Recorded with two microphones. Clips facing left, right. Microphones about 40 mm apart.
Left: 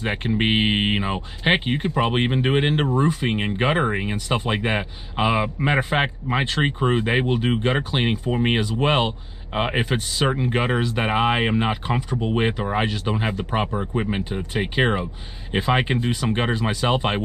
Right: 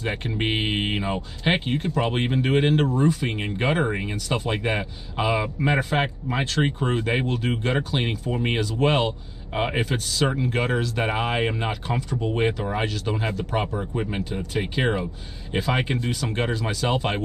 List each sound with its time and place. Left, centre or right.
0.0 s speech: left